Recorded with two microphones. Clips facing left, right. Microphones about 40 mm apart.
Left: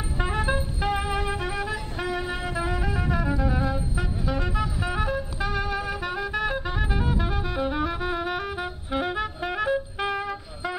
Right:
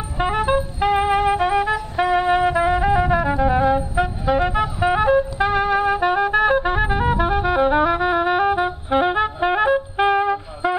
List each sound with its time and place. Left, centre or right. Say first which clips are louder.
0.2 s music: right 8 dB; right